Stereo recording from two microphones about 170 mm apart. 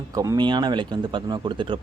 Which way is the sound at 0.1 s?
20° right (ahead or behind).